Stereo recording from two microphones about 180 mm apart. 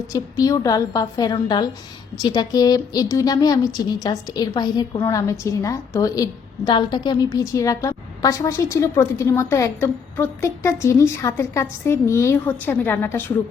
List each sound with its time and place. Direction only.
0.1 s a woman's voice: 20° left (ahead or behind)